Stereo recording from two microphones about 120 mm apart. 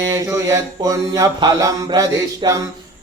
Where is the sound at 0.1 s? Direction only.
25° right (ahead or behind).